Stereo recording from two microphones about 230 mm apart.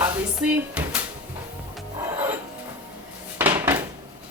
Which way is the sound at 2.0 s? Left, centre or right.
Centre.